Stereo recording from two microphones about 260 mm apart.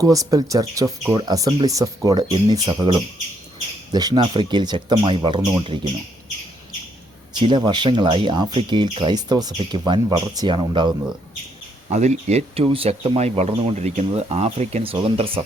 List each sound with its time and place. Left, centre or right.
0.0 s speech: centre
7.3 s speech: centre